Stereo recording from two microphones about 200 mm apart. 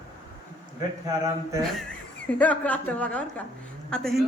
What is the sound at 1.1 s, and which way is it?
Speech, 15° right (ahead or behind).